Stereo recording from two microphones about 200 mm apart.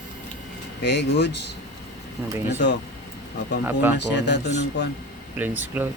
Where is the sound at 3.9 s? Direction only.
60° left (ahead or behind).